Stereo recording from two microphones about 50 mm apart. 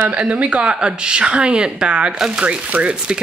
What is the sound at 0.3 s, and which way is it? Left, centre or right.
A woman's voice, right.